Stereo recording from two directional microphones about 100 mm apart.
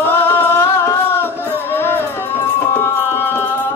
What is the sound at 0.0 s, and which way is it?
Music, 20° left (ahead or behind).